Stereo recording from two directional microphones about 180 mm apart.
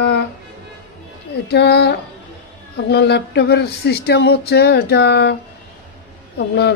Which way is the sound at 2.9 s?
65° left (ahead or behind).